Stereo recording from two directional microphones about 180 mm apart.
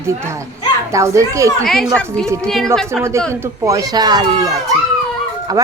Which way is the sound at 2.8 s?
15° right (ahead or behind).